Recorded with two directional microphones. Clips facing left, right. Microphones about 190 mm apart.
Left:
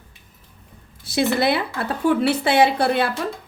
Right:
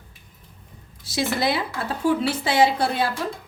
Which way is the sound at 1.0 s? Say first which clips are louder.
Left 4 dB; 60° left (ahead or behind).